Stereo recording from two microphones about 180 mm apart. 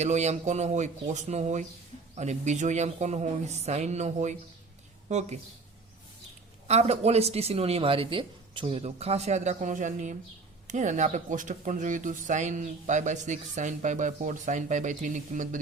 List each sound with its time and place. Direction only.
0.0 s speech: 40° right (ahead or behind)
6.7 s speech: 35° right (ahead or behind)